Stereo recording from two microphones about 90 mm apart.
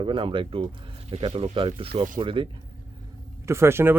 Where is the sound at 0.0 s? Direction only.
70° right (ahead or behind).